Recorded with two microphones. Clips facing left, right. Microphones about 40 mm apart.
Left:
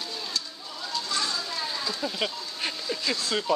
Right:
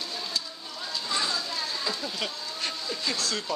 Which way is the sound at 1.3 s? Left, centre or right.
Centre.